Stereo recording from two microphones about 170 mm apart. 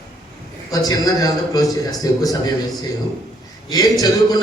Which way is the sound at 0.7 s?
20° left (ahead or behind).